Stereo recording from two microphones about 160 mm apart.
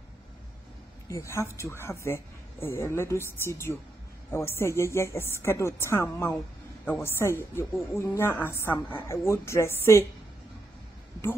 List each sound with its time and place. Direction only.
1.0 s a woman's voice: 15° left (ahead or behind)